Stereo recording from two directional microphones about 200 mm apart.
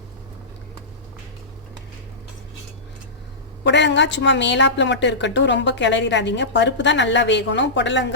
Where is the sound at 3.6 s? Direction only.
60° left (ahead or behind).